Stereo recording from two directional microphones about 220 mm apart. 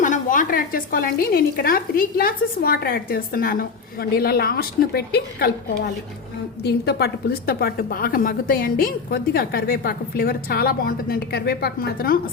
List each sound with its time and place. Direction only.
0.0 s a woman's voice: 35° left (ahead or behind)